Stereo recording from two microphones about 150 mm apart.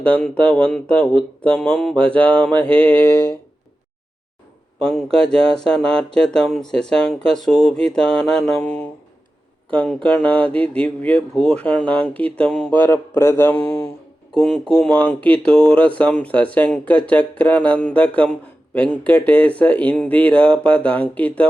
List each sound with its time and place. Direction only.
0.0 s speech: 10° left (ahead or behind)
4.8 s speech: 5° left (ahead or behind)